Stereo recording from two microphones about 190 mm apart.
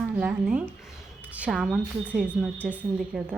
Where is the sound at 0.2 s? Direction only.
5° right (ahead or behind).